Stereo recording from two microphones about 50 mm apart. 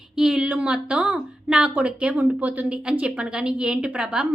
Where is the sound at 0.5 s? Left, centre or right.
Right.